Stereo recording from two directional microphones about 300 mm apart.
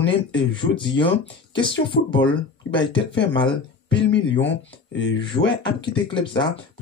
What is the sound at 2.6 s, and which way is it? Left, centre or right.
Speech, left.